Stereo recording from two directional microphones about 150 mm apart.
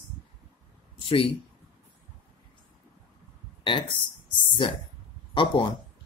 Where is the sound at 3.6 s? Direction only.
35° left (ahead or behind).